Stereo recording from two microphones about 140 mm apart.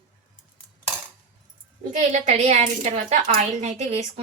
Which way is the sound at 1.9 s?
60° right (ahead or behind).